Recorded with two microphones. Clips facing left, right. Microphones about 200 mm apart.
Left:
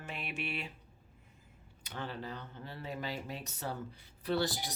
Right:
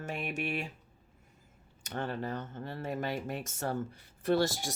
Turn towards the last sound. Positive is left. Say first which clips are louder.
# right 5 dB
turn(degrees=-50)  # may be behind; listen again after turning